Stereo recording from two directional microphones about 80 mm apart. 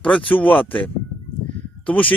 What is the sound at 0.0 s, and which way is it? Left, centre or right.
Speech, centre.